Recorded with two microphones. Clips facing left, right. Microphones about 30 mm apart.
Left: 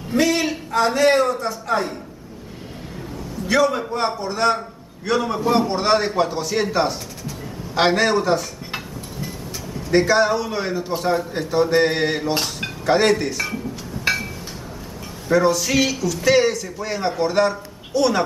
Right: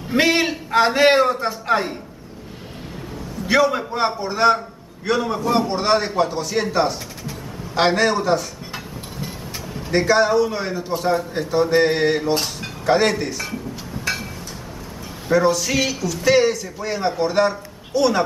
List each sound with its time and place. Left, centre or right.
0.1 s a sound: right
0.7 s a man's voice: right
3.4 s a man's voice: centre
9.8 s a man's voice: centre
14.0 s a sound: centre
15.3 s a man's voice: centre